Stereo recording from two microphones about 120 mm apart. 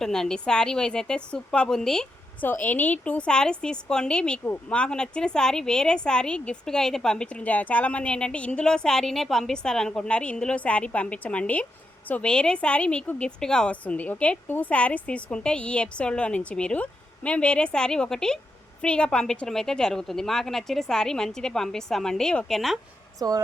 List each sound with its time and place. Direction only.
0.0 s a woman's voice: 5° left (ahead or behind)
2.4 s a woman's voice: 15° left (ahead or behind)
23.2 s speech: 35° right (ahead or behind)